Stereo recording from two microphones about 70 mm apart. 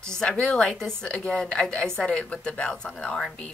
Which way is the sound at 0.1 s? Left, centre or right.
Centre.